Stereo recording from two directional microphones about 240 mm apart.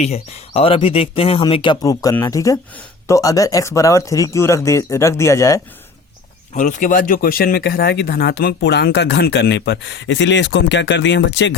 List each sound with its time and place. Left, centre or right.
0.0 s speech: left
6.5 s speech: left